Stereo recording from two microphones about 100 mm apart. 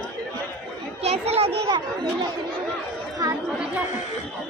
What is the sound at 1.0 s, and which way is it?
Speech, 90° right.